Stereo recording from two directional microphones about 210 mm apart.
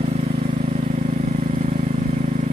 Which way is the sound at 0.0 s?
30° right (ahead or behind).